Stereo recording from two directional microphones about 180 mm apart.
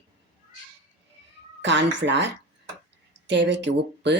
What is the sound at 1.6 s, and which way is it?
Speech, 80° right.